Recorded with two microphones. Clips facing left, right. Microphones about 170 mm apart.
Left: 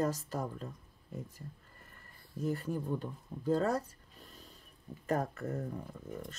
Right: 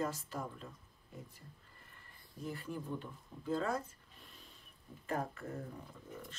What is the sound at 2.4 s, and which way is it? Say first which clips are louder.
Speech: left 7 dB; 40° left (ahead or behind).